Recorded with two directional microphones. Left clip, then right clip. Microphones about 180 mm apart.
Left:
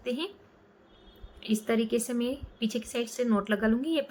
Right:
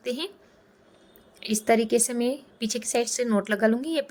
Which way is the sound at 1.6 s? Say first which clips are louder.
Right 8 dB; 45° right (ahead or behind).